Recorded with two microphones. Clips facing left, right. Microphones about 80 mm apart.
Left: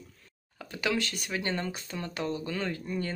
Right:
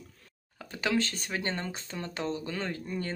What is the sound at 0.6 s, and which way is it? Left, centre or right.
Speech, right.